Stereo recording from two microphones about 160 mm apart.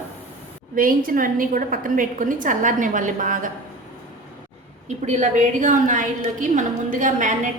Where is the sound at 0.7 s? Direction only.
60° right (ahead or behind).